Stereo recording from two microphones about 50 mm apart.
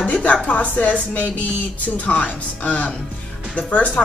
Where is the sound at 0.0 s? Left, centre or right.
Left.